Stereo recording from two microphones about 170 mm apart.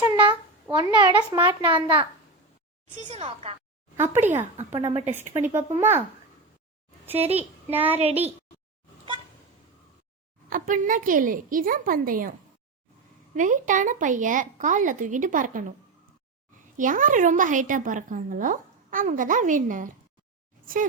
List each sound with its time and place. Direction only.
0.0 s a child's voice: 30° right (ahead or behind)
3.1 s speech: 35° right (ahead or behind)
3.9 s speech: 15° right (ahead or behind)
4.9 s speech: 35° right (ahead or behind)
5.3 s speech: 15° right (ahead or behind)
7.3 s speech: 10° right (ahead or behind)
10.5 s a woman's voice: 50° right (ahead or behind)
13.3 s a woman's voice: 50° right (ahead or behind)
16.7 s a woman's voice: 50° right (ahead or behind)